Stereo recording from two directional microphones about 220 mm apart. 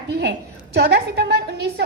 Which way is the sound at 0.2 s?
50° right (ahead or behind).